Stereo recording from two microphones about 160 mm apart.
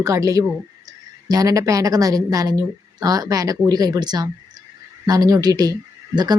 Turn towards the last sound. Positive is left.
turn(degrees=-25)  # may be behind; listen again after turning